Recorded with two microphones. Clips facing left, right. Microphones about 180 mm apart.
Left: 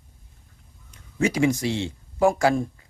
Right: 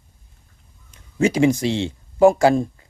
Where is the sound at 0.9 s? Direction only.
25° right (ahead or behind).